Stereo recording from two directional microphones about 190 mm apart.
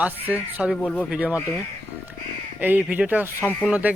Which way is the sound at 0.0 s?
10° right (ahead or behind).